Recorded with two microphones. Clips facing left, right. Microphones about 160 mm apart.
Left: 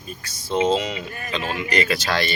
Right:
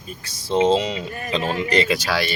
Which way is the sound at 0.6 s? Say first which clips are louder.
Right 3 dB; 30° right (ahead or behind).